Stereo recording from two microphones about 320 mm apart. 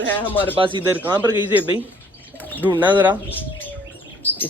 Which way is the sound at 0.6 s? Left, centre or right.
Centre.